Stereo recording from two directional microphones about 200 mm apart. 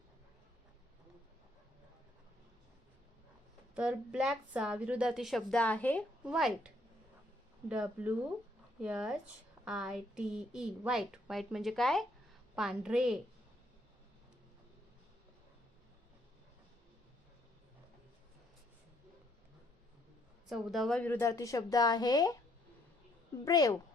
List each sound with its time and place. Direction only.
3.8 s a woman's voice: 5° right (ahead or behind)
6.2 s a woman's voice: 5° right (ahead or behind)
7.7 s a woman's voice: 5° right (ahead or behind)
20.5 s a woman's voice: centre (ahead or behind); by 22.4 s 20° left (ahead or behind)
23.5 s a woman's voice: 20° left (ahead or behind)